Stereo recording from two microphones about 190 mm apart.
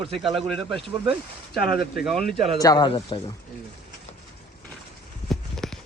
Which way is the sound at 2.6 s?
20° left (ahead or behind).